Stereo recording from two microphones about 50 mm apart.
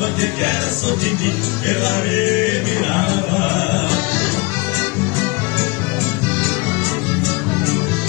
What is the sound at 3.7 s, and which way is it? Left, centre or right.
Music, left.